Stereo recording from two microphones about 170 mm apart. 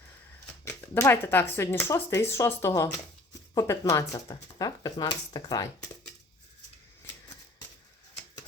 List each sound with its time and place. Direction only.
0.6 s speech: 15° left (ahead or behind)